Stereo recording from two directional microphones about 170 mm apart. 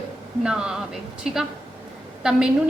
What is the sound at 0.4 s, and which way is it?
A woman's voice, 5° right (ahead or behind).